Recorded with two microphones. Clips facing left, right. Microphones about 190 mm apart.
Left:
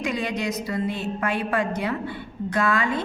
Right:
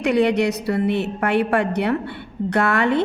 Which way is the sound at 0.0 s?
65° right (ahead or behind).